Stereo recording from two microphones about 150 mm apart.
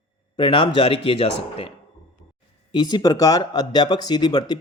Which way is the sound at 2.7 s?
30° left (ahead or behind).